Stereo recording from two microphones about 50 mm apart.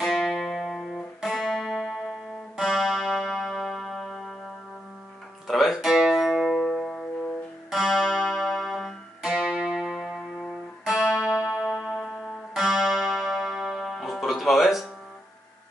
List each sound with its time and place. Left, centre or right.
0.0 s music: centre
5.5 s music: centre
6.5 s music: centre
7.7 s music: centre
9.2 s music: centre
9.9 s music: centre
10.9 s music: centre
11.6 s music: centre